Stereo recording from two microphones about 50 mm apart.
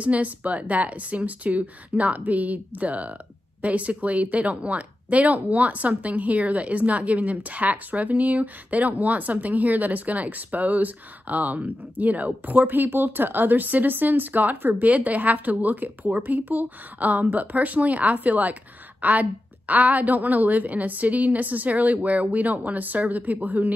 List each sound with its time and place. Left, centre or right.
0.0 s speech: right